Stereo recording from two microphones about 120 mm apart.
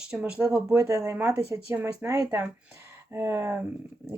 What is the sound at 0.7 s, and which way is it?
Speech, 25° right (ahead or behind).